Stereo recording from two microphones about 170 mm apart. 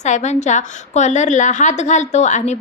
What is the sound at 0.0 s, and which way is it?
A woman's voice, 45° left (ahead or behind).